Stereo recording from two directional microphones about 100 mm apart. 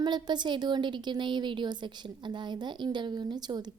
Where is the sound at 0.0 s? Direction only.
45° right (ahead or behind).